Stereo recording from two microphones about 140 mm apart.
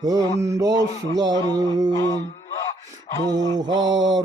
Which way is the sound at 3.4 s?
30° right (ahead or behind).